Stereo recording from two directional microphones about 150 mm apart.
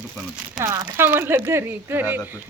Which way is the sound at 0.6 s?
20° right (ahead or behind).